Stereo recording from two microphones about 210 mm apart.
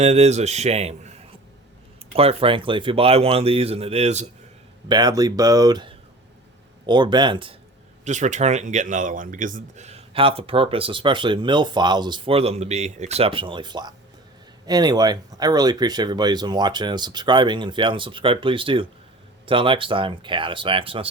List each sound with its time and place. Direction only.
0.0 s a man's voice: 30° right (ahead or behind)
4.9 s speech: 20° right (ahead or behind)
8.0 s speech: 35° right (ahead or behind)